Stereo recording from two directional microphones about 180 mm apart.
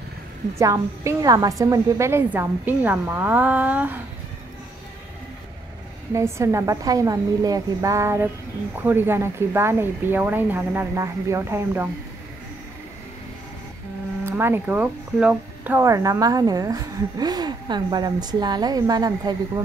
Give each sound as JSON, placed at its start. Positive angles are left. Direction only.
{"t": 0.6, "sound": "a woman's voice", "side_deg": -15}
{"t": 6.1, "sound": "a woman's voice", "side_deg": -15}
{"t": 14.2, "sound": "speech", "side_deg": -10}